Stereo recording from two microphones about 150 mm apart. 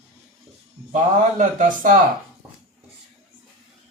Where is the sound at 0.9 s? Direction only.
60° right (ahead or behind).